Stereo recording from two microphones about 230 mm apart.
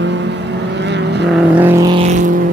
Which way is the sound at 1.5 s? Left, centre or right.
Centre.